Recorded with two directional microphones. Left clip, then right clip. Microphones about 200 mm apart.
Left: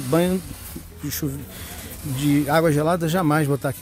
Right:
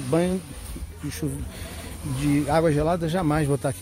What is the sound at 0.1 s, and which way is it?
Speech, 20° left (ahead or behind).